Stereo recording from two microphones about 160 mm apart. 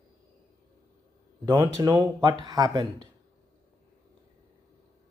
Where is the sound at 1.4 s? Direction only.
20° right (ahead or behind).